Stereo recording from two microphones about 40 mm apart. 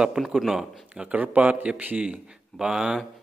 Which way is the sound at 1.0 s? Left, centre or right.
Right.